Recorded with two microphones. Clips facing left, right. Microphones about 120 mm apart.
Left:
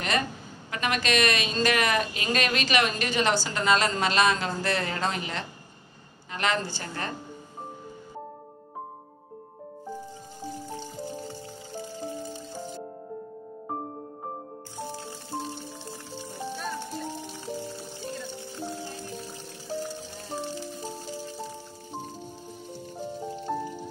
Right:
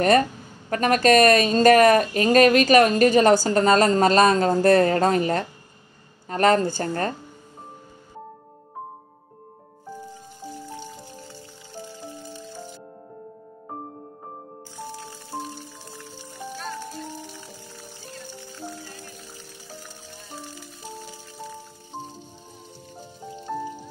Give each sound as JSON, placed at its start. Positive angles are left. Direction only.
{"t": 0.7, "sound": "speech", "side_deg": -45}
{"t": 15.9, "sound": "music", "side_deg": 20}
{"t": 18.0, "sound": "music", "side_deg": 20}